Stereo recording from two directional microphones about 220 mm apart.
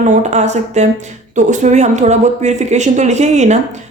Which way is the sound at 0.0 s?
35° right (ahead or behind).